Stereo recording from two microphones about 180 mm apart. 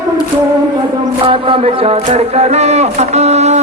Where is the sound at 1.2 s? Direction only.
30° right (ahead or behind).